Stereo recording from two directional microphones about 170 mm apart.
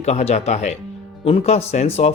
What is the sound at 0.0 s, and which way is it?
Speech, 40° left (ahead or behind).